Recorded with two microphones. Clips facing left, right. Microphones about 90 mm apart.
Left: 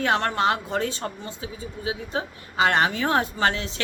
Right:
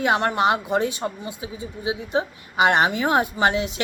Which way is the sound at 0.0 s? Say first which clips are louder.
Right 2 dB; 15° right (ahead or behind).